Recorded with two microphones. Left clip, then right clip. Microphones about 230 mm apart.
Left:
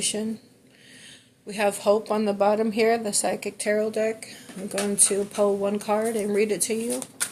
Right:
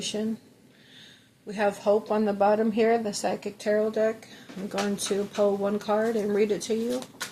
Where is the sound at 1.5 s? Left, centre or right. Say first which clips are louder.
Left 2 dB; left.